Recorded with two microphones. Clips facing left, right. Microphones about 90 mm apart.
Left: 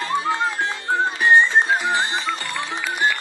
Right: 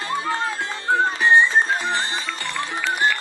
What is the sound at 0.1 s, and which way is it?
Music, 20° left (ahead or behind).